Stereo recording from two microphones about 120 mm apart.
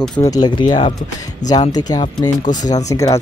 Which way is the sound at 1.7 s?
35° left (ahead or behind).